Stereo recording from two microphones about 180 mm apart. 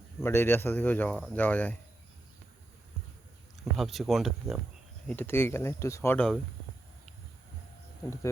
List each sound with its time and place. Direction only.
0.2 s speech: 15° left (ahead or behind)
3.6 s speech: centre (ahead or behind)
5.0 s speech: 10° left (ahead or behind)
8.0 s speech: 15° left (ahead or behind)